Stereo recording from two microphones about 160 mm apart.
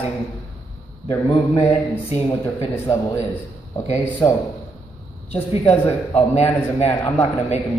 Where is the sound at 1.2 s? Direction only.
25° left (ahead or behind).